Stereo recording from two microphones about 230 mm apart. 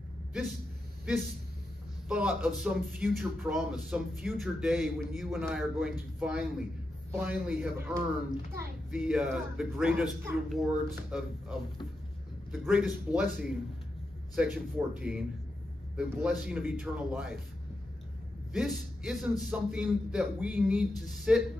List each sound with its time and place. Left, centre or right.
0.3 s a man's voice: centre
18.5 s a man's voice: centre